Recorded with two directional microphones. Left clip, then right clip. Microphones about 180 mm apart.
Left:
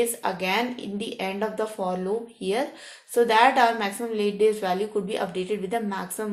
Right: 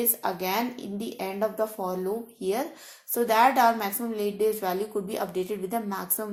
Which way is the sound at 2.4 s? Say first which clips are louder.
Left 2 dB; 40° right (ahead or behind).